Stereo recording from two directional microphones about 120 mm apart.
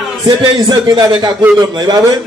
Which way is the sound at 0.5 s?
35° right (ahead or behind).